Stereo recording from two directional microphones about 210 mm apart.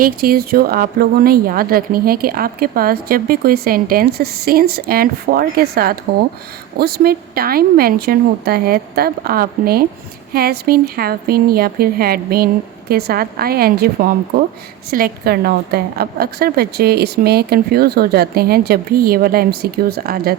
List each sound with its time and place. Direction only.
0.0 s speech: 45° right (ahead or behind)